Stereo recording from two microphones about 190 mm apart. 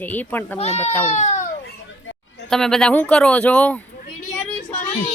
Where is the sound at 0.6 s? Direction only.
35° left (ahead or behind).